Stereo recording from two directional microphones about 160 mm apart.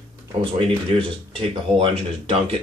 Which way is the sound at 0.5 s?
35° right (ahead or behind).